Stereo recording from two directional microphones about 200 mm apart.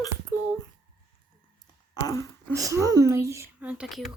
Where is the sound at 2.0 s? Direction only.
20° left (ahead or behind).